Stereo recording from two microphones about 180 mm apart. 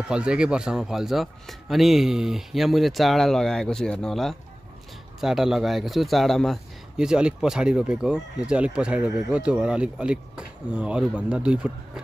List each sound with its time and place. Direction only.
0.1 s a man's voice: 5° right (ahead or behind)